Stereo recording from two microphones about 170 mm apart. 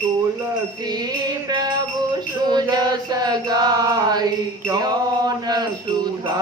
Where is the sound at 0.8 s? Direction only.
25° right (ahead or behind).